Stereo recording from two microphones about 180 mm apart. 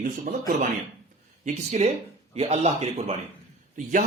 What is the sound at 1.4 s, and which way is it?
Speech, 35° right (ahead or behind).